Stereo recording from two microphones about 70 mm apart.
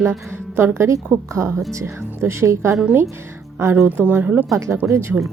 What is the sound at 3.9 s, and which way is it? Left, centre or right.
Speech, right.